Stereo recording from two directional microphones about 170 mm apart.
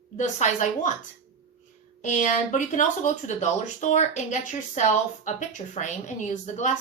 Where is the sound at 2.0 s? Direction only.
45° left (ahead or behind).